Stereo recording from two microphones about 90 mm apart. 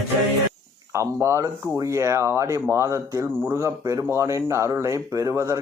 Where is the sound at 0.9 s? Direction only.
30° right (ahead or behind).